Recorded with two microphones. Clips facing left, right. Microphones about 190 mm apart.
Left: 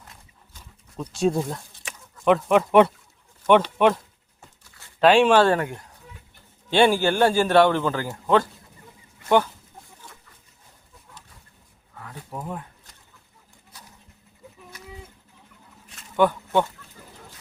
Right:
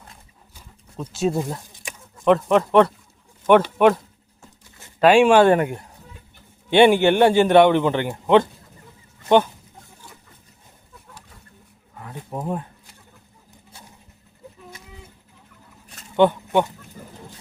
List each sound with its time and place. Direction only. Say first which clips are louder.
1.1 s speech: even; 5° right (ahead or behind)
2.2 s speech: right 2 dB; 5° left (ahead or behind)
3.4 s a man's voice: right 3 dB; 10° right (ahead or behind)
11.9 s wild animals: right 4 dB; 20° right (ahead or behind)
13.7 s vehicle: right 2 dB; 30° right (ahead or behind)
16.1 s speech: right 3 dB; 20° right (ahead or behind)